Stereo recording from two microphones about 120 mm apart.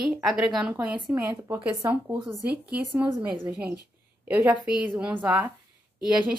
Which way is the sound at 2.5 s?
10° right (ahead or behind).